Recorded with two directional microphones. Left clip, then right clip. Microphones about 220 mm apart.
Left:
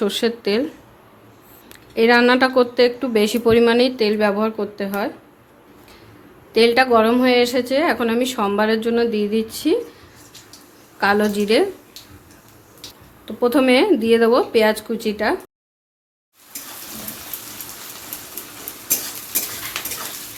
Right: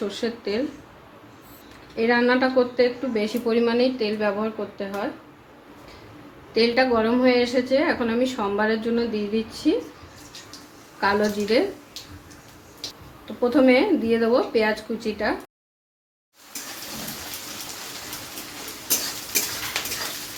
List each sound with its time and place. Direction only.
0.0 s a woman's voice: 50° left (ahead or behind)
2.0 s a woman's voice: 50° left (ahead or behind)
6.5 s a woman's voice: 50° left (ahead or behind)
11.0 s a woman's voice: 50° left (ahead or behind)
13.4 s a woman's voice: 50° left (ahead or behind)